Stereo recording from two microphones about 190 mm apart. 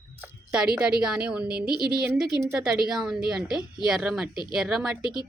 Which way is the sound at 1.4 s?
55° right (ahead or behind).